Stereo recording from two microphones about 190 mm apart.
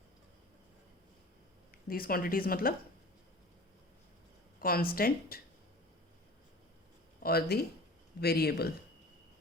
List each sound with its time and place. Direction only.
1.7 s speech: 50° left (ahead or behind)
4.6 s speech: 50° left (ahead or behind)
7.2 s speech: 55° left (ahead or behind)